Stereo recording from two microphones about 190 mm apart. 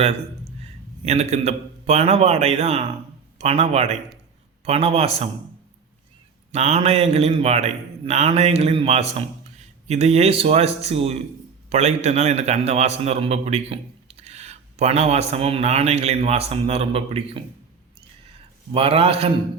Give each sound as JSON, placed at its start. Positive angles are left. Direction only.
{"t": 0.6, "sound": "a man's voice", "side_deg": -35}
{"t": 6.5, "sound": "a man's voice", "side_deg": -35}
{"t": 18.7, "sound": "a man's voice", "side_deg": -30}